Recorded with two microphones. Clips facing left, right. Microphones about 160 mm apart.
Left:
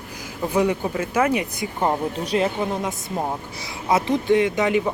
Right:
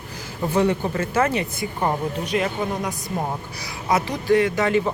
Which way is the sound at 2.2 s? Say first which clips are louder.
Left 3 dB; 35° left (ahead or behind).